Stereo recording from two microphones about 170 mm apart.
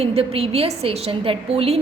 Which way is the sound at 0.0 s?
35° right (ahead or behind).